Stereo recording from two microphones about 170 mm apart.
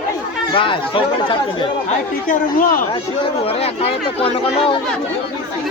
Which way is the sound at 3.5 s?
35° left (ahead or behind).